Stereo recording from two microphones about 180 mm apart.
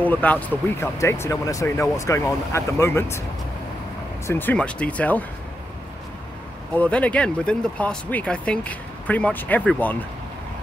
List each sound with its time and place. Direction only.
0.0 s speech: 10° left (ahead or behind)
4.3 s speech: 10° left (ahead or behind)
6.7 s speech: 10° left (ahead or behind)